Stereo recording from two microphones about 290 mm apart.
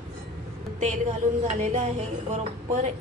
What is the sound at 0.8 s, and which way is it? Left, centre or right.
Speech, right.